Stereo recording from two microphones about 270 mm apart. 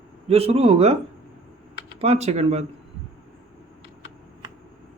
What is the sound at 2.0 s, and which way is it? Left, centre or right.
Speech, right.